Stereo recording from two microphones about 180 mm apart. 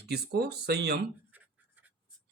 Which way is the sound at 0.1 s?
65° right (ahead or behind).